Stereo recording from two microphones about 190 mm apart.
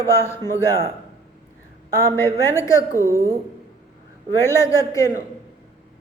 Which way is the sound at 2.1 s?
15° left (ahead or behind).